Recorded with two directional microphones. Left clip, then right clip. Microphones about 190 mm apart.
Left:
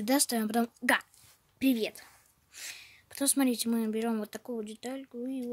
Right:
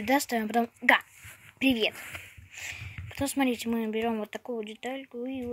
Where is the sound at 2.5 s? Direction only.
50° left (ahead or behind).